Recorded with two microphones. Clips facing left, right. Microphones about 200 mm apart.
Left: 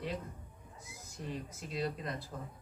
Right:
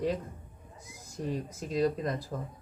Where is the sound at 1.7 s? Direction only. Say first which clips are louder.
Right 9 dB; 45° right (ahead or behind).